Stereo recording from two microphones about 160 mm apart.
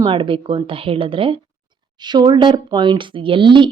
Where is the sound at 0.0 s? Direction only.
30° right (ahead or behind).